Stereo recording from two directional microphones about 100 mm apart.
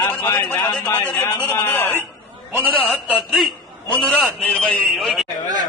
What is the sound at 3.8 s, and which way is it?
A man's voice, 15° left (ahead or behind).